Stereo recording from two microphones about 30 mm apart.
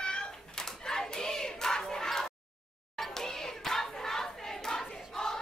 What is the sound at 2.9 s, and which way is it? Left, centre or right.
Battle cry, centre.